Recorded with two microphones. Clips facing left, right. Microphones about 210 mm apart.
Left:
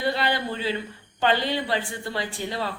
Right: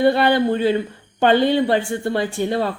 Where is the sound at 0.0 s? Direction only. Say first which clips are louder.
Right 10 dB; 55° right (ahead or behind).